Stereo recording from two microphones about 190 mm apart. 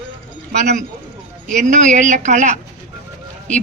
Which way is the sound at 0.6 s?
40° right (ahead or behind).